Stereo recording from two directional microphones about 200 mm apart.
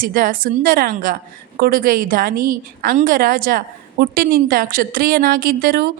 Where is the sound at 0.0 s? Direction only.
45° right (ahead or behind).